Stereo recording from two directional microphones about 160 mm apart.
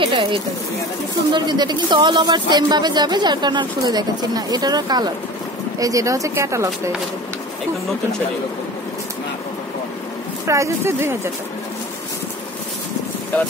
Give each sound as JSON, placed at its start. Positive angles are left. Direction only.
{"t": 0.0, "sound": "speech", "side_deg": -30}
{"t": 10.4, "sound": "speech", "side_deg": -20}